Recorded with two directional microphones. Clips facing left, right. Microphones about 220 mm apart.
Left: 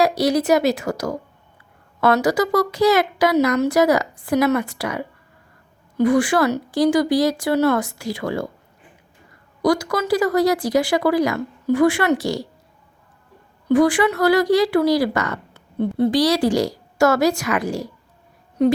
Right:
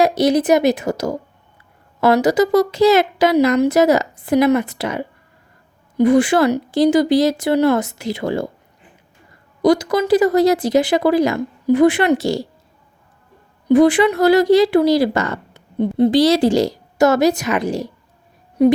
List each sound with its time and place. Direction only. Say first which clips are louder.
0.0 s speech: right 3 dB; 20° right (ahead or behind)
9.6 s speech: right 4 dB; 20° right (ahead or behind)
13.7 s a woman's voice: right 4 dB; 20° right (ahead or behind)
18.6 s a woman's voice: right 4 dB; 10° right (ahead or behind)